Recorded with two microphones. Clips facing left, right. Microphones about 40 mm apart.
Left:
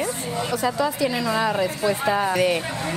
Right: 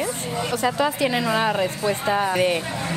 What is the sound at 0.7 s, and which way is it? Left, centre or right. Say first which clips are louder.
Speech: right 1 dB; right.